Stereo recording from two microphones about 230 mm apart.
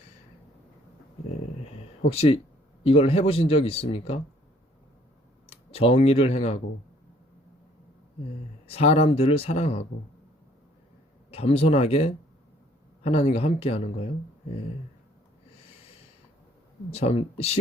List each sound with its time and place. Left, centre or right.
2.0 s speech: left
5.5 s speech: left
8.6 s speech: left
11.3 s speech: left
16.9 s speech: left